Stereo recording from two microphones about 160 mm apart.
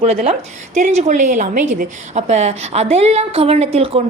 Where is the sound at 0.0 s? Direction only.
40° right (ahead or behind).